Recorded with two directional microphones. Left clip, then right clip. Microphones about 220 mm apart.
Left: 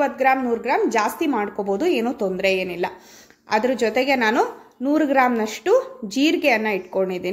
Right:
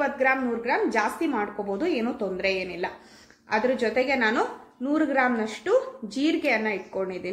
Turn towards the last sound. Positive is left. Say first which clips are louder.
# left 7 dB
turn(degrees=45)  # may be behind; listen again after turning